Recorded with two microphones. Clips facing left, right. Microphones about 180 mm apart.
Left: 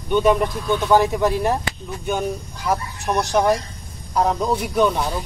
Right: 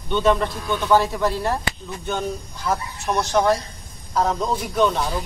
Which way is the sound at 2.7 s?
15° left (ahead or behind).